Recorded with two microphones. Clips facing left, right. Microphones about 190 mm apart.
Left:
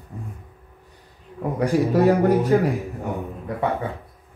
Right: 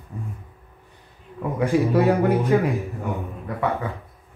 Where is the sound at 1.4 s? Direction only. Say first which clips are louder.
Even; 40° left (ahead or behind).